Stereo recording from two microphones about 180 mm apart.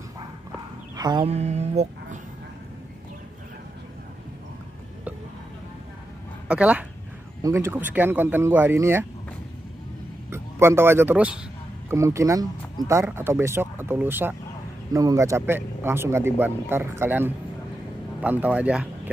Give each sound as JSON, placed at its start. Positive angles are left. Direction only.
{"t": 0.9, "sound": "mantra", "side_deg": -25}
{"t": 1.3, "sound": "speech", "side_deg": -35}
{"t": 6.4, "sound": "a woman's voice", "side_deg": -5}
{"t": 10.3, "sound": "speech", "side_deg": -15}